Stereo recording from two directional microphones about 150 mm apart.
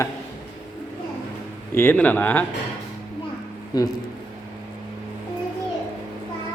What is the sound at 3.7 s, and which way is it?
Speech, 25° left (ahead or behind).